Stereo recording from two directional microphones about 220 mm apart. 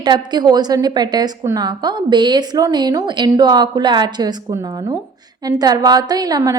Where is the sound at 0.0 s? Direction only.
20° right (ahead or behind).